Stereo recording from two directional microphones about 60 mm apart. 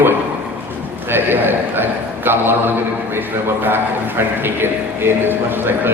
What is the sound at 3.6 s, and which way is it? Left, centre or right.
Speech, right.